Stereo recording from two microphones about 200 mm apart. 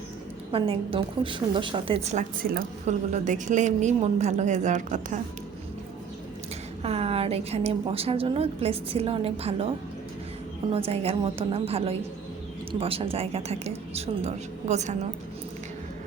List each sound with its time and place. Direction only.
0.5 s a woman's voice: 25° right (ahead or behind)
6.8 s a woman's voice: 30° right (ahead or behind)
10.7 s a woman's voice: 30° right (ahead or behind)